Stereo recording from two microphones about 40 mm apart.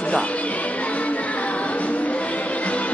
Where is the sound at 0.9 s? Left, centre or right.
Left.